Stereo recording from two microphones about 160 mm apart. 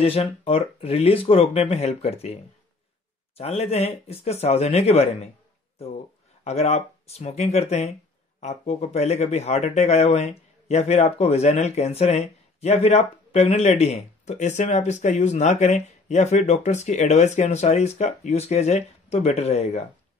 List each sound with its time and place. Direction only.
0.0 s speech: 35° left (ahead or behind)
3.3 s speech: 40° left (ahead or behind)
6.4 s speech: 45° left (ahead or behind)